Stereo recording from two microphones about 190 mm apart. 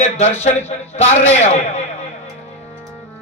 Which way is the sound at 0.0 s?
35° left (ahead or behind).